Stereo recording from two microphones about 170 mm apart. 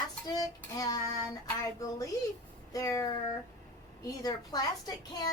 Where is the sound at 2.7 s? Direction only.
20° left (ahead or behind).